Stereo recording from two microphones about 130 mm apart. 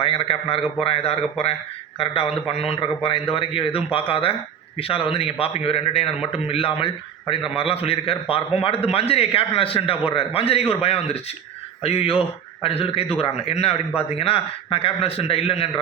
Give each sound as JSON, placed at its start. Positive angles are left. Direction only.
{"t": 0.0, "sound": "a man's voice", "side_deg": 45}